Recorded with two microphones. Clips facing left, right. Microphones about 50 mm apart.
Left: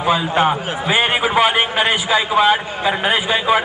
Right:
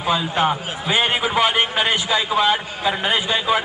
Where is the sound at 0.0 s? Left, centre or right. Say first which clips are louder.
Left 4 dB; centre.